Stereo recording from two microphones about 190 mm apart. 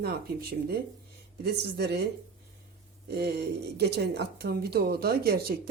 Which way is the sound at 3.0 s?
55° right (ahead or behind).